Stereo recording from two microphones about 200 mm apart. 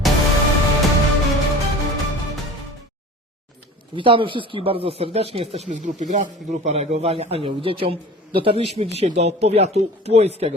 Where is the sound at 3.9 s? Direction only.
25° right (ahead or behind).